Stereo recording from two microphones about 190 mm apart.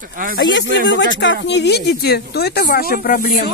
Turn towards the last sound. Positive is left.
turn(degrees=50)  # may be behind; listen again after turning